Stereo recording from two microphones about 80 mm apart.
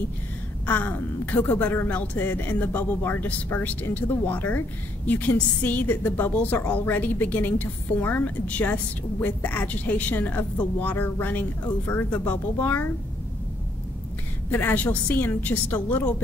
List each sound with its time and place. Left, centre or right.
0.7 s a woman's voice: centre
14.5 s a woman's voice: left